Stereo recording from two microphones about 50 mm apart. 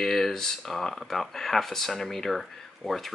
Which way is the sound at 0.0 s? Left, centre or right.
Centre.